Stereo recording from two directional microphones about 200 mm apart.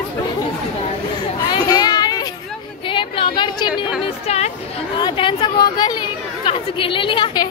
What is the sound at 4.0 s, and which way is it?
A woman's voice, 30° left (ahead or behind).